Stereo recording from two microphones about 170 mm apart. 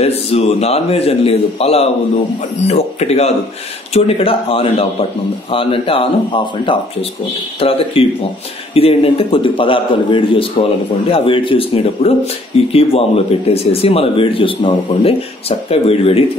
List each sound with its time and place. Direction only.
0.0 s speech: 35° left (ahead or behind)